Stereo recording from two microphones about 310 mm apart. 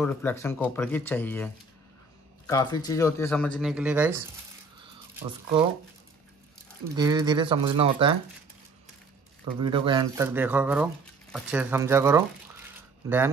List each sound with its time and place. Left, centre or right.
0.0 s speech: centre
5.2 s speech: centre
7.0 s speech: centre
9.6 s speech: centre